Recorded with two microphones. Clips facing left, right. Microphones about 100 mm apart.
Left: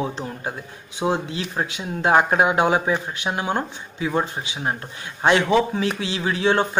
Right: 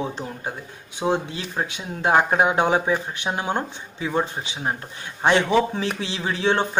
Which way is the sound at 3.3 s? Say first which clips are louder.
Left 1 dB; centre (ahead or behind).